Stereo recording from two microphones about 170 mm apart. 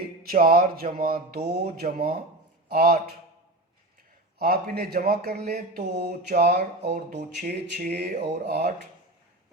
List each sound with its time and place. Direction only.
0.2 s speech: 60° right (ahead or behind)
4.4 s speech: 60° right (ahead or behind)
7.1 s speech: 50° right (ahead or behind); by 8.7 s 70° right (ahead or behind)